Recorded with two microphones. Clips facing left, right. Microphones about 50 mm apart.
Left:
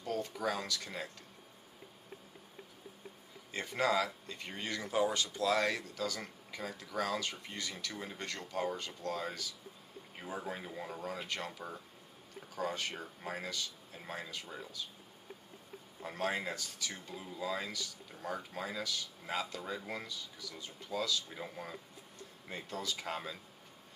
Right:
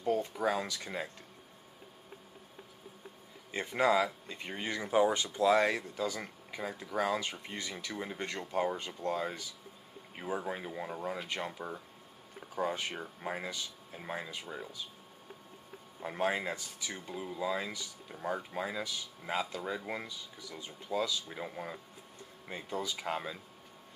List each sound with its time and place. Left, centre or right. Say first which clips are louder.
0.0 s speech: right 5 dB; right
3.5 s speech: right 4 dB; centre
16.0 s speech: right 4 dB; centre